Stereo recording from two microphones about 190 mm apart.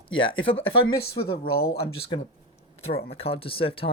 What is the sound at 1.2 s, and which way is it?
Speech, 55° left (ahead or behind).